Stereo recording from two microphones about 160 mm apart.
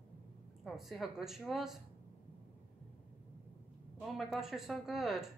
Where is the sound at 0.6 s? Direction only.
Centre (ahead or behind).